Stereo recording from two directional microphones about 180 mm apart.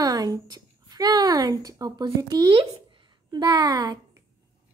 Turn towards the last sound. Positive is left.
turn(degrees=-20)  # may be behind; listen again after turning